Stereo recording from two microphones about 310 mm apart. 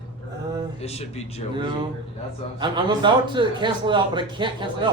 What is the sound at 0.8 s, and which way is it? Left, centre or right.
Speech, centre.